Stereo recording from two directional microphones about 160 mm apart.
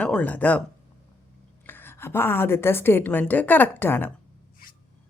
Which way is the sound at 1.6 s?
15° left (ahead or behind).